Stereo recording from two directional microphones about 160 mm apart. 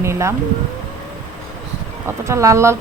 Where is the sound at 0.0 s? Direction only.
15° right (ahead or behind).